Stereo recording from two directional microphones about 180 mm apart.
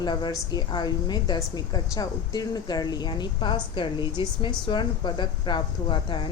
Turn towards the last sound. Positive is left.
turn(degrees=25)  # may be behind; listen again after turning